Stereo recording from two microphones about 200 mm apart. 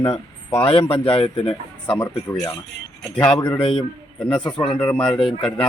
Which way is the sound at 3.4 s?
20° left (ahead or behind).